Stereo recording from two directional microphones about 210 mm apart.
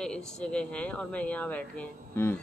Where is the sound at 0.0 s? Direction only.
5° left (ahead or behind).